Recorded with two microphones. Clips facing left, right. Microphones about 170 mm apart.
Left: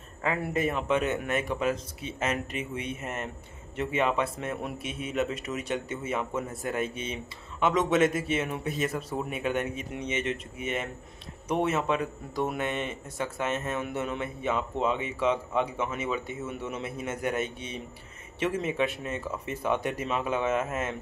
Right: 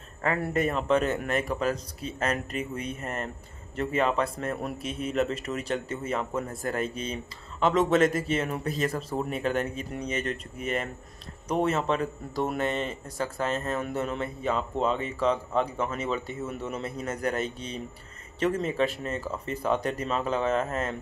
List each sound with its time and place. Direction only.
0.3 s speech: 5° left (ahead or behind)
9.7 s speech: 35° right (ahead or behind)
10.1 s speech: 5° left (ahead or behind)
12.5 s speech: 15° left (ahead or behind)
13.6 s speech: centre (ahead or behind)